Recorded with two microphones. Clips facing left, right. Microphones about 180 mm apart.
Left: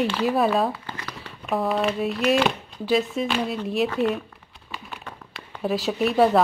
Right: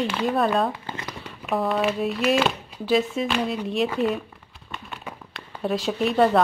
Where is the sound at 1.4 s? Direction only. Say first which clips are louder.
Even; centre (ahead or behind).